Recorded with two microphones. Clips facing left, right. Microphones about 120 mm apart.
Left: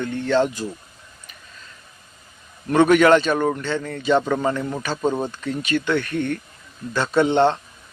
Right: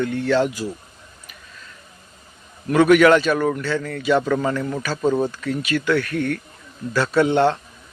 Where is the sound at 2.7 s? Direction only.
25° left (ahead or behind).